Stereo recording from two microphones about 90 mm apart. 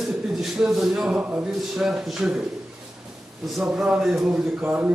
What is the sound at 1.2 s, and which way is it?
Speech, 15° right (ahead or behind).